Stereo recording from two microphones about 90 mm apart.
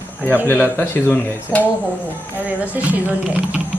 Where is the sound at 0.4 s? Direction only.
25° left (ahead or behind).